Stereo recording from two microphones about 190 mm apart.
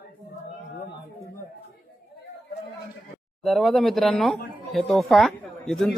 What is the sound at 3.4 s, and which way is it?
Speech, centre (ahead or behind).